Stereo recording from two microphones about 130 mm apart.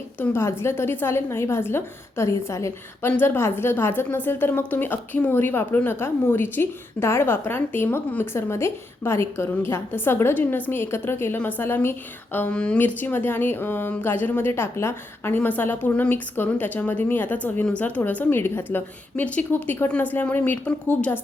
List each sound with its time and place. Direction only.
0.2 s a woman's voice: 20° left (ahead or behind)